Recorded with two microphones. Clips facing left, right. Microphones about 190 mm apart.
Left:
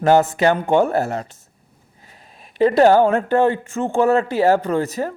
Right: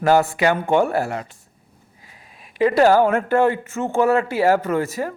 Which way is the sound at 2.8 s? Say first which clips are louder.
Left 2 dB; 20° left (ahead or behind).